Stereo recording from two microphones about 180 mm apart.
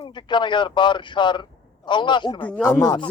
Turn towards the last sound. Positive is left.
turn(degrees=20)  # may be behind; listen again after turning